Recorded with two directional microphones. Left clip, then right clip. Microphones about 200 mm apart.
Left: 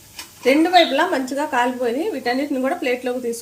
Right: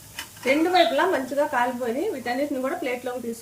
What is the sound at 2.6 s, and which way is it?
Speech, 45° left (ahead or behind).